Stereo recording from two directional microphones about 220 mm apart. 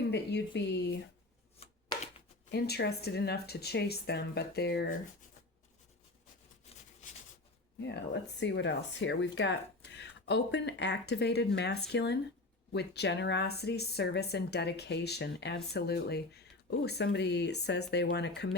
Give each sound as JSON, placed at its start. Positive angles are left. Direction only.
{"t": 0.1, "sound": "speech", "side_deg": 50}
{"t": 2.5, "sound": "speech", "side_deg": 45}
{"t": 7.9, "sound": "speech", "side_deg": 50}